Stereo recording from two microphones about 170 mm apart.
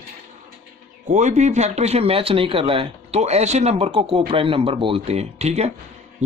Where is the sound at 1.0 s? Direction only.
45° right (ahead or behind).